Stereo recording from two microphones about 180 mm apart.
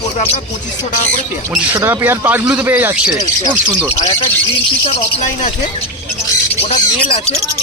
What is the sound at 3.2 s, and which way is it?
Speech, 20° left (ahead or behind).